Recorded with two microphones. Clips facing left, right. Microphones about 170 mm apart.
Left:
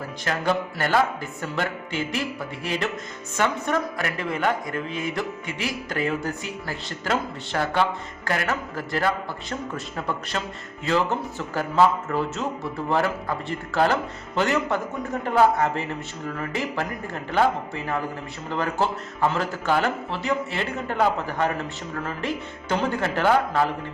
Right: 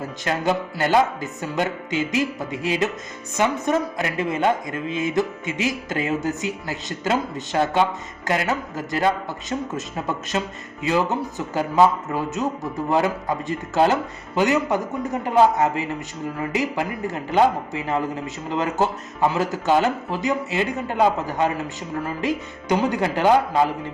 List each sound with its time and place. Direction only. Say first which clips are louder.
0.3 s a man's voice: right 2 dB; 20° right (ahead or behind)